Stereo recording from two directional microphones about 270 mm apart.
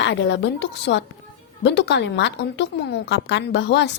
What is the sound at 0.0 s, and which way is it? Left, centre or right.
A woman's voice, left.